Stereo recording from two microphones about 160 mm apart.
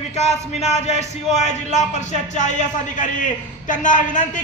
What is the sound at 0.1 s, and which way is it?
A man's voice, 45° left (ahead or behind).